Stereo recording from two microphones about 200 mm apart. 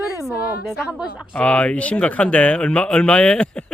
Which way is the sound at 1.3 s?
5° left (ahead or behind).